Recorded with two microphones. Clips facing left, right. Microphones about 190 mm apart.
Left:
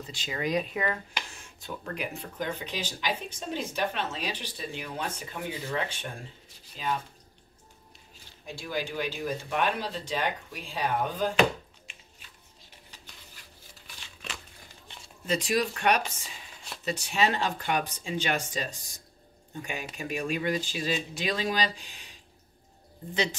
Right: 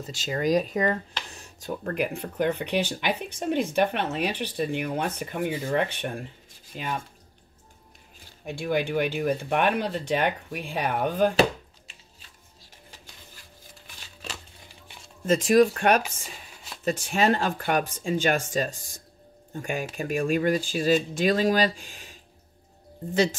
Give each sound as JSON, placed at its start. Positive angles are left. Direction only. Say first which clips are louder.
{"t": 0.0, "sound": "speech", "louder": "right 6 dB", "side_deg": -45}
{"t": 1.3, "sound": "a sound", "louder": "right 3 dB", "side_deg": -35}
{"t": 2.0, "sound": "speech", "louder": "right 9 dB", "side_deg": -60}
{"t": 8.5, "sound": "speech", "louder": "right 7 dB", "side_deg": -60}
{"t": 11.9, "sound": "music", "louder": "even", "side_deg": -40}
{"t": 15.2, "sound": "speech", "louder": "right 9 dB", "side_deg": -45}